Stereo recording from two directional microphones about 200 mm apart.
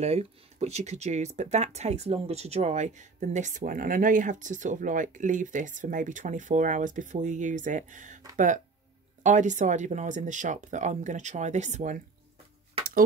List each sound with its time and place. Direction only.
0.0 s speech: 30° right (ahead or behind)
9.2 s speech: 35° right (ahead or behind)